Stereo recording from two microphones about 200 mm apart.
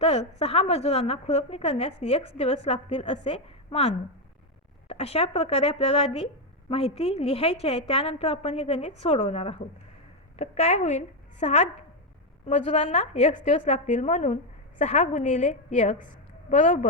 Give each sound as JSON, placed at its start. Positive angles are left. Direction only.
{"t": 0.0, "sound": "a woman's voice", "side_deg": 30}